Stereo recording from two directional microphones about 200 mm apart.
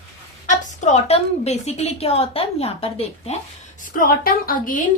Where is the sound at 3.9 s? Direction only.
45° left (ahead or behind).